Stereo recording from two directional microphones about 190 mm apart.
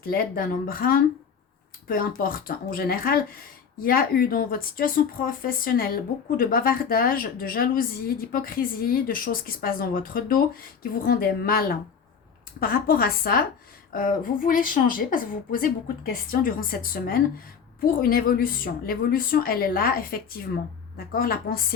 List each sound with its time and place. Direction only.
0.0 s speech: 50° left (ahead or behind)